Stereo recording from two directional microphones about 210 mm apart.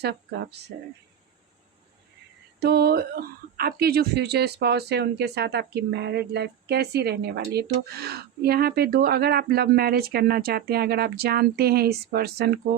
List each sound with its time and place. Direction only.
2.6 s speech: 50° right (ahead or behind)